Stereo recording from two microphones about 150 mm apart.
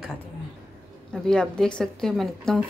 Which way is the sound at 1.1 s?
5° left (ahead or behind).